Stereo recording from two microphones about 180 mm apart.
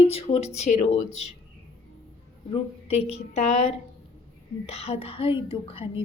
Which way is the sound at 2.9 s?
35° left (ahead or behind).